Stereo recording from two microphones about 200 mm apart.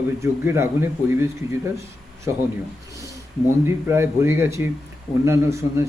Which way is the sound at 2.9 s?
15° right (ahead or behind).